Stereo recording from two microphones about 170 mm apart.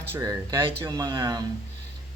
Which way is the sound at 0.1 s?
20° right (ahead or behind).